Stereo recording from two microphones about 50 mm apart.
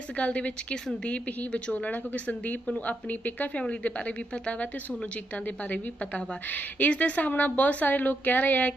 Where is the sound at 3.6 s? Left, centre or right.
Left.